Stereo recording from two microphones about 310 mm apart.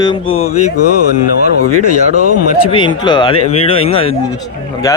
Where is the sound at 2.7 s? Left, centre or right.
Centre.